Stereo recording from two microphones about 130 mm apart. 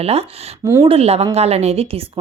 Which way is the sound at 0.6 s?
20° right (ahead or behind).